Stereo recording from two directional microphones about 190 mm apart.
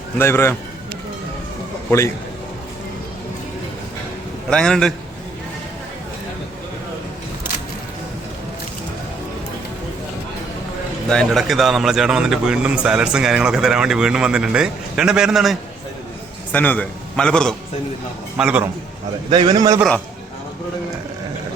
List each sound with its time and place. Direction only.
0.2 s a man's voice: 15° left (ahead or behind)
4.4 s a man's voice: 5° left (ahead or behind)
11.1 s a man's voice: 5° left (ahead or behind)
18.3 s a man's voice: 5° right (ahead or behind)
19.3 s a man's voice: 20° right (ahead or behind)